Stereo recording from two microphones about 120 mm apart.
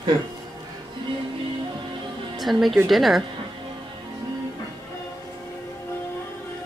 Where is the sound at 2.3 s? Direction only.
Centre (ahead or behind).